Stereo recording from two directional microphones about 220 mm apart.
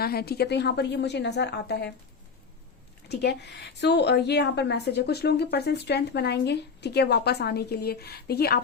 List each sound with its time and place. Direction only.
0.0 s a woman's voice: 45° left (ahead or behind)
3.1 s a woman's voice: 50° left (ahead or behind)